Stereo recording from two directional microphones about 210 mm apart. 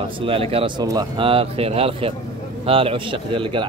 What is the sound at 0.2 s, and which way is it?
Speech, 25° right (ahead or behind).